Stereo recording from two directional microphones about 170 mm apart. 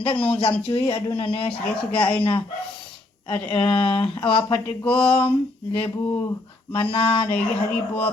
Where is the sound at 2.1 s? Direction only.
30° left (ahead or behind).